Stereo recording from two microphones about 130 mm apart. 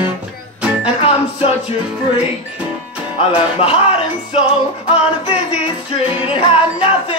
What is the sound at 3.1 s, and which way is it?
Music, 45° left (ahead or behind).